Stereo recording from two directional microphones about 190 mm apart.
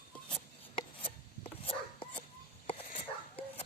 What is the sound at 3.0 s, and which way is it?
Whispering, 30° left (ahead or behind).